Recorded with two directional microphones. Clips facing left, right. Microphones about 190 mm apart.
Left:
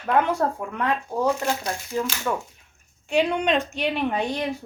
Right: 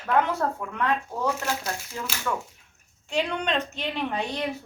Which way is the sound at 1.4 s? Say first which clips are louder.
Left 4 dB; 5° right (ahead or behind).